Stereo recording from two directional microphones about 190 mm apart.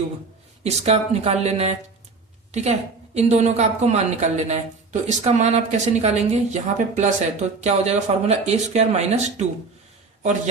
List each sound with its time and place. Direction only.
0.6 s a woman's voice: 35° right (ahead or behind)